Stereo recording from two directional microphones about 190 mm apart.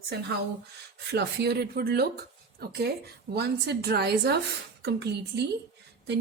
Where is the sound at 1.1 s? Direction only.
60° right (ahead or behind).